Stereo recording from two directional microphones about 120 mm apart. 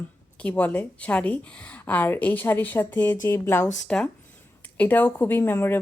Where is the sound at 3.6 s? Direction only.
5° left (ahead or behind).